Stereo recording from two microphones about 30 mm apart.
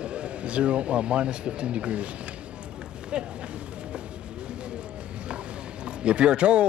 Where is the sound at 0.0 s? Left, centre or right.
Right.